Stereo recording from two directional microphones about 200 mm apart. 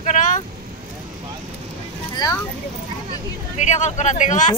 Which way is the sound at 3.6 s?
35° left (ahead or behind).